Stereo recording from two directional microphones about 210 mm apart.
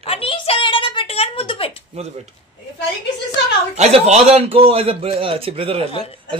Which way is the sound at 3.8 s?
30° right (ahead or behind).